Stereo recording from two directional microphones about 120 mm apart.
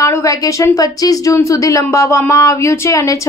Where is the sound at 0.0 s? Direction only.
25° left (ahead or behind).